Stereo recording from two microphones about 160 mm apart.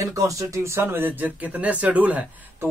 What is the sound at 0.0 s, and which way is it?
A man's voice, 20° right (ahead or behind).